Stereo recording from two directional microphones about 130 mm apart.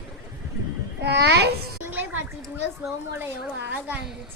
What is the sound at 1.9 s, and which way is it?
Speech, 15° right (ahead or behind).